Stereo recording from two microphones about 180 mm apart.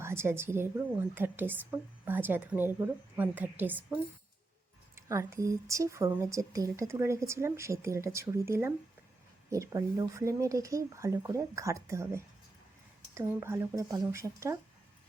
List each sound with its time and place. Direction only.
0.0 s a woman's voice: 15° right (ahead or behind)
4.9 s a woman's voice: 15° right (ahead or behind)
13.4 s a woman's voice: 15° right (ahead or behind)